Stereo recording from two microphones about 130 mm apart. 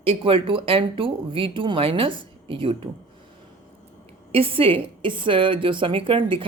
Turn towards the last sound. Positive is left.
turn(degrees=-40)  # may be behind; listen again after turning